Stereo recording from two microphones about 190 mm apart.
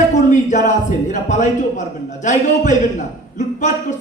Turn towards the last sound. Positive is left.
turn(degrees=40)  # may be behind; listen again after turning